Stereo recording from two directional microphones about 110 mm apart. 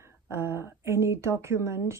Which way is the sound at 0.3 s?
20° right (ahead or behind).